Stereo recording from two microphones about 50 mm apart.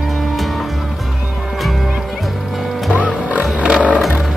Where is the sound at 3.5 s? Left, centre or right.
Right.